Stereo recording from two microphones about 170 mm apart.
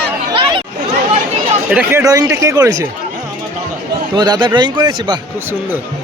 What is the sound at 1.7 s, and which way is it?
A man's voice, 10° right (ahead or behind).